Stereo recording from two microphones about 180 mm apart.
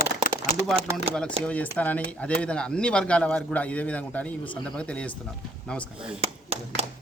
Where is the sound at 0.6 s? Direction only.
Centre (ahead or behind).